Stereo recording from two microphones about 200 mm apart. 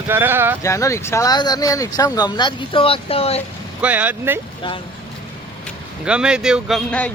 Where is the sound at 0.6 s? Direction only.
15° left (ahead or behind).